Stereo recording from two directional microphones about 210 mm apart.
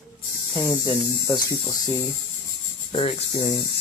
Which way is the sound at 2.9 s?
25° left (ahead or behind).